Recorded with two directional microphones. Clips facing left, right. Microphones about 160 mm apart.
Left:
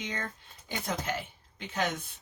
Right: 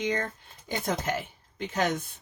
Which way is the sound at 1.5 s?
45° right (ahead or behind).